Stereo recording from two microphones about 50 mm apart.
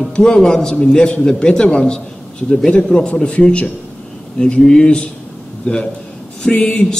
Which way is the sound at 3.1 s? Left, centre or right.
Left.